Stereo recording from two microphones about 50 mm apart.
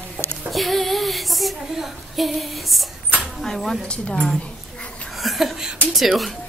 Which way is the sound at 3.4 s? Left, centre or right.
Centre.